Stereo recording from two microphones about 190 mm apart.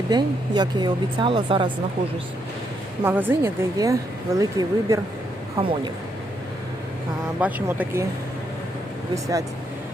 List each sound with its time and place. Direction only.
0.1 s speech: 25° right (ahead or behind)
3.0 s speech: 10° right (ahead or behind)
5.5 s speech: 30° right (ahead or behind)
7.3 s speech: 10° right (ahead or behind)
9.1 s speech: 15° right (ahead or behind)